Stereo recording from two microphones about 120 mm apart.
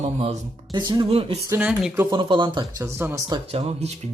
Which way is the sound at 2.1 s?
40° right (ahead or behind).